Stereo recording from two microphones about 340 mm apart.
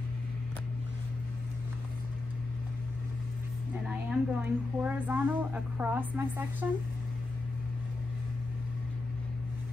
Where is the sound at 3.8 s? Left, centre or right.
Centre.